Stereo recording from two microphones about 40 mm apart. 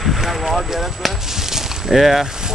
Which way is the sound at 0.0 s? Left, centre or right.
Centre.